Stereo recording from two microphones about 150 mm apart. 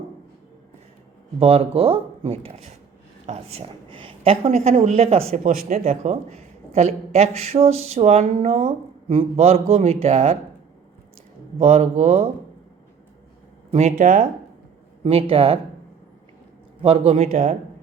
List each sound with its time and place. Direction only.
1.4 s speech: 40° right (ahead or behind)
5.3 s speech: 60° right (ahead or behind)
6.0 s a man's voice: 45° right (ahead or behind)
11.6 s a man's voice: 45° right (ahead or behind)
13.7 s speech: 50° right (ahead or behind)
16.8 s a man's voice: 40° right (ahead or behind)